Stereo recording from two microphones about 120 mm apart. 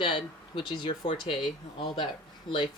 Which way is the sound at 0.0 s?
40° left (ahead or behind).